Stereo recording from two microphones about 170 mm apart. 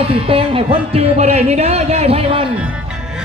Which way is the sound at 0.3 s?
30° right (ahead or behind).